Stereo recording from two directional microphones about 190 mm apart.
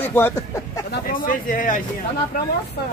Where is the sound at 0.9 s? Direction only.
45° left (ahead or behind).